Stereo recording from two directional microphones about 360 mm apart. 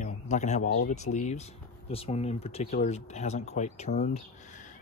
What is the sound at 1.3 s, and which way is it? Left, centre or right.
Speech, centre.